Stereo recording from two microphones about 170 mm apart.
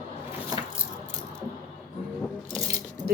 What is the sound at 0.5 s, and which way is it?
Keys jangling, 20° right (ahead or behind).